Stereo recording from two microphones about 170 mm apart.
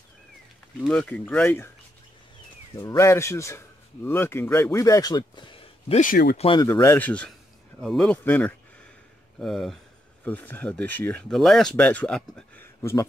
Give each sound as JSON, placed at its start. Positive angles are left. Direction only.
{"t": 0.7, "sound": "speech", "side_deg": 5}
{"t": 2.8, "sound": "a man's voice", "side_deg": 15}
{"t": 5.9, "sound": "speech", "side_deg": 55}
{"t": 6.3, "sound": "speech", "side_deg": 35}
{"t": 6.6, "sound": "speech", "side_deg": 15}